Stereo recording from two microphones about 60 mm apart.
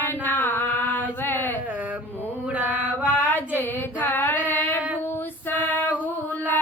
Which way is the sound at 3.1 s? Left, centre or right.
Left.